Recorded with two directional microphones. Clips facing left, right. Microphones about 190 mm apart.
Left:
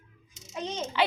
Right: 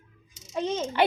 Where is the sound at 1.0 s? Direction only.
50° right (ahead or behind).